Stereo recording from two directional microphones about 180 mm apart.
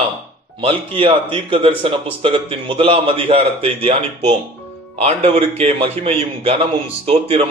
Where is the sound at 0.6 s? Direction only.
30° right (ahead or behind).